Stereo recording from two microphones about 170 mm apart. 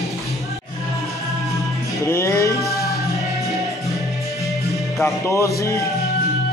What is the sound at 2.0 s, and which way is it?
Music, 15° left (ahead or behind).